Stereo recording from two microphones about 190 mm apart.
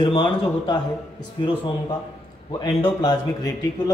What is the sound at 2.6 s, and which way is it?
A man's voice, 20° left (ahead or behind).